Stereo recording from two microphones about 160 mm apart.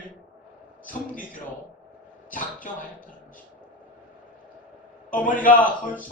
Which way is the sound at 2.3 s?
55° left (ahead or behind).